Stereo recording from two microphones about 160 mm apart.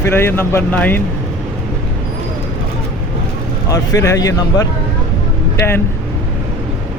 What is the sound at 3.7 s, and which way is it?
Speech, 20° left (ahead or behind).